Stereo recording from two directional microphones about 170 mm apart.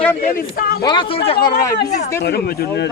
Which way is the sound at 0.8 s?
25° left (ahead or behind).